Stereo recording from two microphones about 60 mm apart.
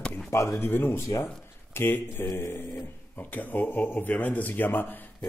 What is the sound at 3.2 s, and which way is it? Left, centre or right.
Speech, left.